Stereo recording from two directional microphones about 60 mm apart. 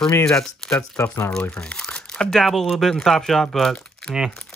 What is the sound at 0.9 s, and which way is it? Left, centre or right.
Speech, left.